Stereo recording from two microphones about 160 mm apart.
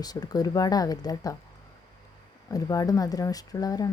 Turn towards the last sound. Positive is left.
turn(degrees=25)  # may be behind; listen again after turning